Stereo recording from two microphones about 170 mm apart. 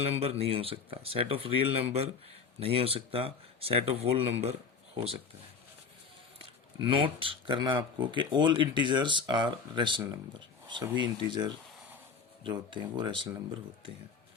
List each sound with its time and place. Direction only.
0.0 s speech: 35° right (ahead or behind)
6.8 s speech: 30° right (ahead or behind)